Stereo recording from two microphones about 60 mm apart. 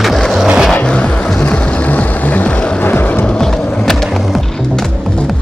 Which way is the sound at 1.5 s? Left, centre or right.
Left.